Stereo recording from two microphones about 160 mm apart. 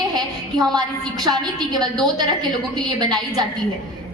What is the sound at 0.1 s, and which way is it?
A woman's voice, 25° right (ahead or behind).